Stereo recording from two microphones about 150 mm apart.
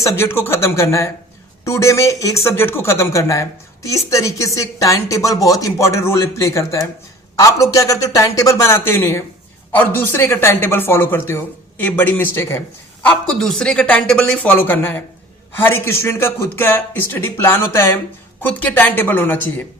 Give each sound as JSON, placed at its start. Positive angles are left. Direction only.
{"t": 0.0, "sound": "speech", "side_deg": 20}